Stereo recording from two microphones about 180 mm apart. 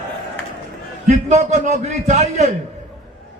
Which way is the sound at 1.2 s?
40° right (ahead or behind).